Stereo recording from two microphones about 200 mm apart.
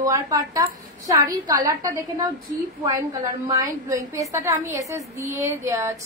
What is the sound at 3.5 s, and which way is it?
A woman's voice, 15° right (ahead or behind).